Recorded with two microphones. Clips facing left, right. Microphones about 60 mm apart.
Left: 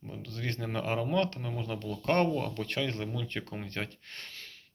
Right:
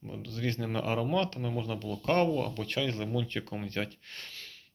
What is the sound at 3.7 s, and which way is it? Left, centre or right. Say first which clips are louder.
Speech: right 2 dB; left.